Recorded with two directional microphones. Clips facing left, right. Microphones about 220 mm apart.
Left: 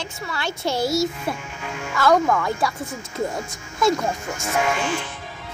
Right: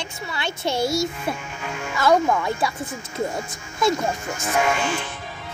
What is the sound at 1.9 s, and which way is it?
Speech, 20° right (ahead or behind).